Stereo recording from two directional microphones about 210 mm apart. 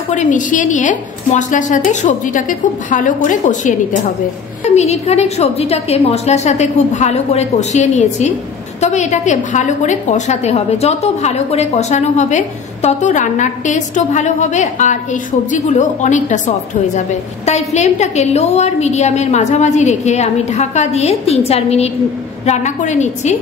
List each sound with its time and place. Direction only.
0.1 s a woman's voice: 35° left (ahead or behind)
4.7 s a woman's voice: 30° left (ahead or behind)